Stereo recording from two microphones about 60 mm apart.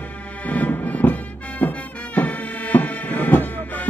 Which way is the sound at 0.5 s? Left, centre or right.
Left.